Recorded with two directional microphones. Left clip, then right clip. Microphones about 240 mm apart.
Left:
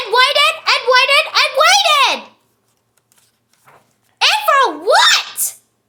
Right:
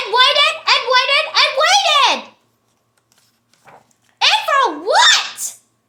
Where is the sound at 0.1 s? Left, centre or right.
Left.